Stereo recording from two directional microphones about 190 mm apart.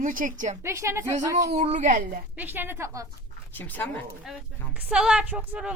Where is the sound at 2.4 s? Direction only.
10° right (ahead or behind).